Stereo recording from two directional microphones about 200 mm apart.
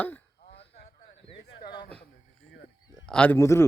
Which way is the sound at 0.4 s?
55° left (ahead or behind).